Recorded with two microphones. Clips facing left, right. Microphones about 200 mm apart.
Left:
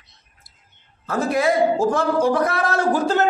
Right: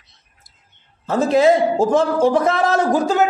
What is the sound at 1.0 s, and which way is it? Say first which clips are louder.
A man's voice: right 6 dB; 25° right (ahead or behind).